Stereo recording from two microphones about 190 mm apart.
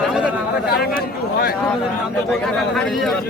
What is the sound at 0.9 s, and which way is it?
Speech, 55° left (ahead or behind).